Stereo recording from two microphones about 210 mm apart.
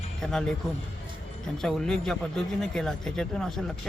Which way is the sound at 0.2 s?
5° left (ahead or behind).